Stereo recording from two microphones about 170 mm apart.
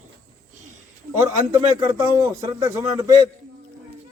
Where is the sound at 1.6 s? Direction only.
30° right (ahead or behind).